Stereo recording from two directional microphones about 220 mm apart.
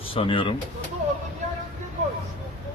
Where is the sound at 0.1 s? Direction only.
25° left (ahead or behind).